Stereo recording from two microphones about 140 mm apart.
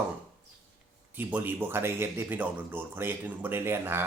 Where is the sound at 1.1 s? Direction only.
15° right (ahead or behind).